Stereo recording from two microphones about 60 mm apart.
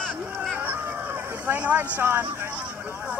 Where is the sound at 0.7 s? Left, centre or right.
Right.